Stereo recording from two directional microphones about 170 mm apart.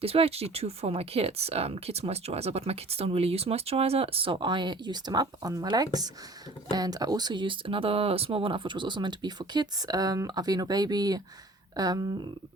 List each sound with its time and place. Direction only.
0.0 s speech: 35° right (ahead or behind)